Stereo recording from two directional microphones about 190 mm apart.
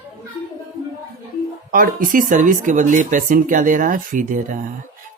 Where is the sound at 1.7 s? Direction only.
45° right (ahead or behind).